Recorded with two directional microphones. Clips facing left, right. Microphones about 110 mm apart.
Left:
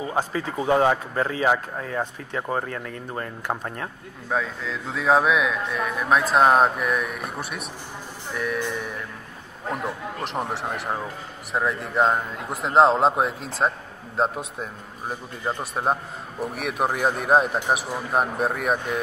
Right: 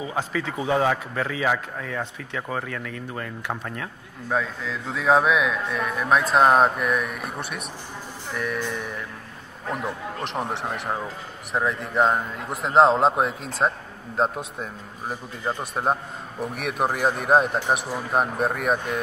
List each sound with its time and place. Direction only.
0.1 s speech: 40° left (ahead or behind)
4.3 s a man's voice: centre (ahead or behind)
10.2 s a man's voice: centre (ahead or behind)